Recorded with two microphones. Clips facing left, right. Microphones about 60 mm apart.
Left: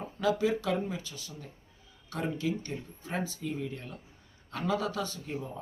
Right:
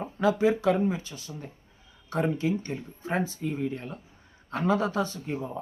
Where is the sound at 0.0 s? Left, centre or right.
Right.